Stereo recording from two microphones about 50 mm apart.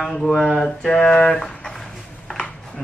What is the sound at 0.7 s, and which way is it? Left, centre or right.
Speech, centre.